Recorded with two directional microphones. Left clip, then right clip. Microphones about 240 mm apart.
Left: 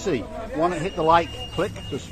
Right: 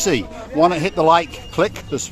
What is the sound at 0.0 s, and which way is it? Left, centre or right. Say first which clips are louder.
Speech: right 6 dB; right.